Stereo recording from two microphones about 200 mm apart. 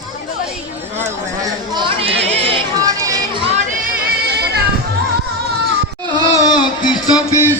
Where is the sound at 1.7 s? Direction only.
25° right (ahead or behind).